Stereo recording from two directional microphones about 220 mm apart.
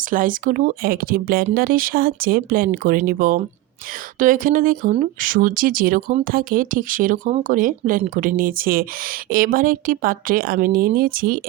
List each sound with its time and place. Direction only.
0.1 s speech: 40° right (ahead or behind)